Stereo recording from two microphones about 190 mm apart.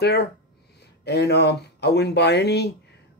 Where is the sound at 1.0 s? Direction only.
60° left (ahead or behind).